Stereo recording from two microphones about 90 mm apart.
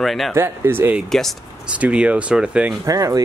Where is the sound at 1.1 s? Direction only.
5° left (ahead or behind).